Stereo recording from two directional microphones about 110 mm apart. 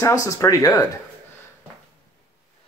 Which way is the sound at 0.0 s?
30° left (ahead or behind).